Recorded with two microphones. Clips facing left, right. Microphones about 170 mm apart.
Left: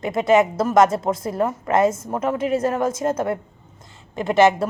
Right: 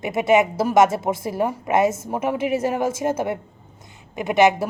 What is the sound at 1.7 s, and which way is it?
Speech, 25° right (ahead or behind).